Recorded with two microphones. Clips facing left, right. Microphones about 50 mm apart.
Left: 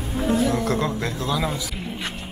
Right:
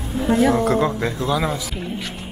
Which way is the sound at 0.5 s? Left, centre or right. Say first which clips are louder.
Right 5 dB; centre.